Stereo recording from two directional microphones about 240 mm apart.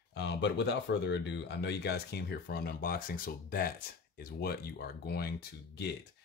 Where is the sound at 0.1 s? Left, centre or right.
Left.